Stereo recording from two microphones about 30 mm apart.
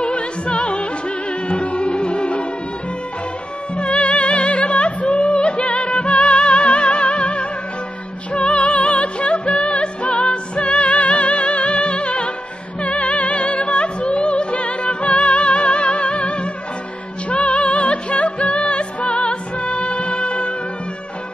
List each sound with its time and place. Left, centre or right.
0.0 s music: left
3.7 s music: left
17.3 s music: left